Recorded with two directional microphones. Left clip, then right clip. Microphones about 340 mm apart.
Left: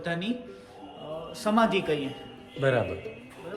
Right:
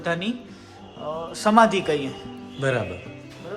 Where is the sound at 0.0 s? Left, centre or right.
Centre.